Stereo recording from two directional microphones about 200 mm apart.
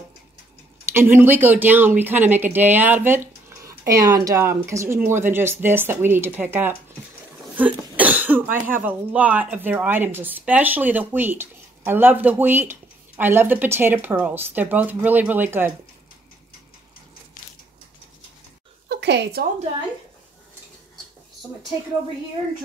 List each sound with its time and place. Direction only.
0.8 s speech: 10° right (ahead or behind)
18.9 s a woman's voice: 60° right (ahead or behind)